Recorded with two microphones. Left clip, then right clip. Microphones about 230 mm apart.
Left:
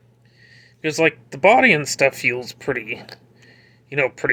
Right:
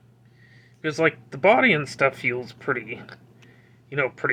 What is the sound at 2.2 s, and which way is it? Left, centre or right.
Speech, centre.